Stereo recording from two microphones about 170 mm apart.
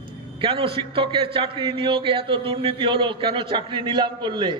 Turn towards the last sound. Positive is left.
turn(degrees=-25)  # may be behind; listen again after turning